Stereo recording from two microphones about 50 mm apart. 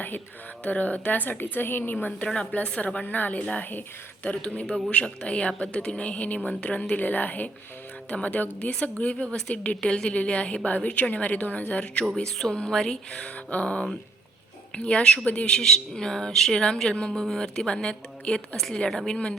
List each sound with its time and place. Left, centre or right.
0.6 s a woman's voice: left
12.1 s speech: centre
13.2 s a woman's voice: left
14.8 s a woman's voice: left
15.5 s a woman's voice: centre
18.5 s a woman's voice: centre